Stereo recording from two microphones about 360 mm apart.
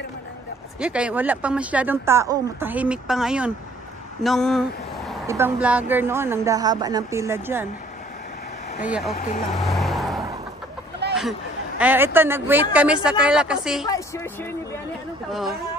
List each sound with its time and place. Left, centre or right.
0.7 s speech: centre
9.1 s speech: left
9.5 s vehicle: centre
11.0 s a sound: right
11.8 s speech: centre
13.8 s speech: centre